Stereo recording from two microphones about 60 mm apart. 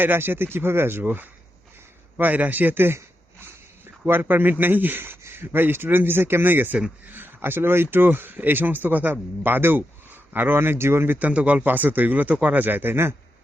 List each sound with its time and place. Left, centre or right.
0.0 s speech: right
4.0 s speech: right
11.2 s speech: right